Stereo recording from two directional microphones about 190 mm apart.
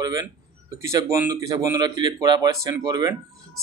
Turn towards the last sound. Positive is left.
turn(degrees=-20)  # may be behind; listen again after turning